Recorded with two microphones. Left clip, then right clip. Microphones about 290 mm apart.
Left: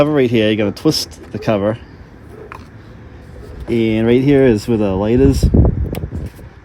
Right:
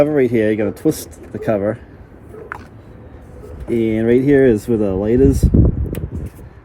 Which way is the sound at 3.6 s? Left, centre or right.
Left.